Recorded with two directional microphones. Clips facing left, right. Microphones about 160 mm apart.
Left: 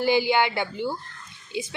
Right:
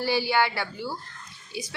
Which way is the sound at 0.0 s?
20° left (ahead or behind).